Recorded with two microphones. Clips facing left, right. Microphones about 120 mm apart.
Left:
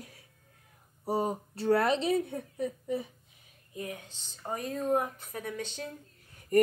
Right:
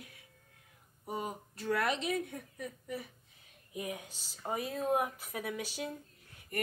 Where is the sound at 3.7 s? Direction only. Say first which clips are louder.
Left 1 dB; 15° right (ahead or behind).